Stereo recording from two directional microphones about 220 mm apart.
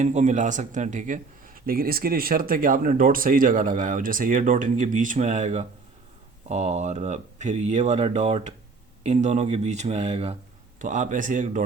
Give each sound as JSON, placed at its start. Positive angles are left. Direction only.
{"t": 0.0, "sound": "speech", "side_deg": -30}